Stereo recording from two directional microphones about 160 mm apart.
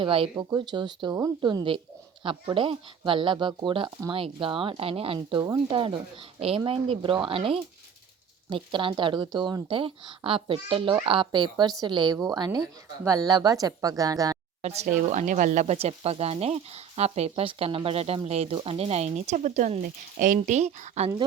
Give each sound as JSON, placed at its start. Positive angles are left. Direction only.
{"t": 0.0, "sound": "speech", "side_deg": -35}
{"t": 14.6, "sound": "speech", "side_deg": -45}